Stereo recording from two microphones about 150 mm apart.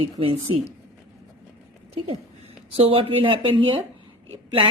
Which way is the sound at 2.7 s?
40° right (ahead or behind).